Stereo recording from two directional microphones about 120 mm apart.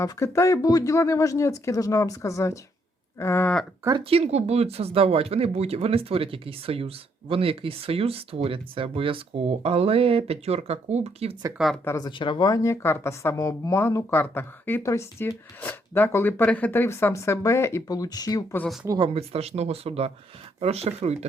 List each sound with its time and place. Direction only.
0.0 s speech: 25° left (ahead or behind)
4.1 s speech: 60° right (ahead or behind)
11.5 s speech: centre (ahead or behind)
11.9 s speech: 35° left (ahead or behind)
18.9 s speech: 50° right (ahead or behind)